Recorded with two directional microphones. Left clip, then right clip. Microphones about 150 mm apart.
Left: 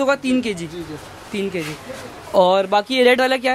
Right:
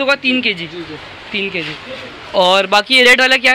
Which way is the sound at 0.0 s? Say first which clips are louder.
Right 5 dB; 40° left (ahead or behind).